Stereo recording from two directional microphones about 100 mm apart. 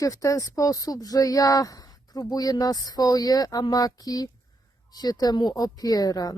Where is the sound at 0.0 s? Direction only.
35° left (ahead or behind).